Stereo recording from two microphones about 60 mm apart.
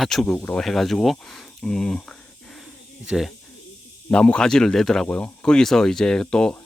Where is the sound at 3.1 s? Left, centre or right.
Centre.